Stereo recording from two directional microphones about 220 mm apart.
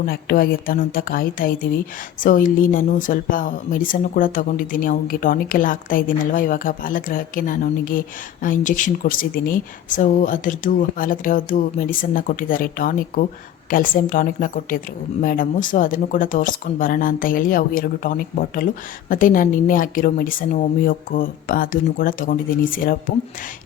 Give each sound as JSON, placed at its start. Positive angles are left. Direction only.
{"t": 0.0, "sound": "speech", "side_deg": 45}